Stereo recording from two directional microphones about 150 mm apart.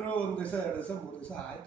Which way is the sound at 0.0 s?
10° left (ahead or behind).